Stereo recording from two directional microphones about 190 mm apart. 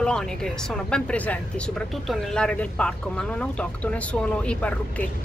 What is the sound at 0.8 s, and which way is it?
Speech, 5° left (ahead or behind).